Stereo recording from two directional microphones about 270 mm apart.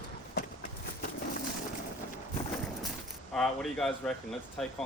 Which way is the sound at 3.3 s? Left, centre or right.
Centre.